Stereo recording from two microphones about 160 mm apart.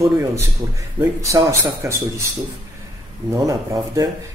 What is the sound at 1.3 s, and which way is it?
Speech, 20° right (ahead or behind).